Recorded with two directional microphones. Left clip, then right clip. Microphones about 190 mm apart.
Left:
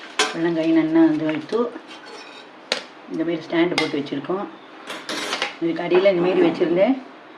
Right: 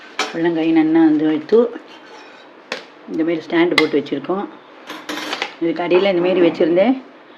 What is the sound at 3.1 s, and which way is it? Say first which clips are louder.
Speech: right 5 dB; 55° right (ahead or behind).